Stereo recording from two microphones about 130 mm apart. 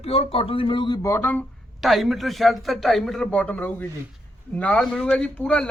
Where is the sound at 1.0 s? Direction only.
15° left (ahead or behind).